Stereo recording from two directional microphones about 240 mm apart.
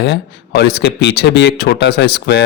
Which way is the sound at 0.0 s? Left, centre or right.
Left.